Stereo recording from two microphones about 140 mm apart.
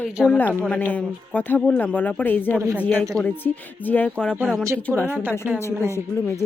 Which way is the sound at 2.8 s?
15° left (ahead or behind).